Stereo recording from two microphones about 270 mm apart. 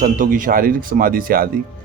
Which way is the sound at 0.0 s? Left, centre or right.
Right.